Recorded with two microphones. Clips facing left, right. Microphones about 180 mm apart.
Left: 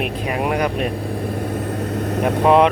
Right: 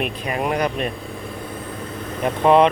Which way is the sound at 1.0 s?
35° left (ahead or behind).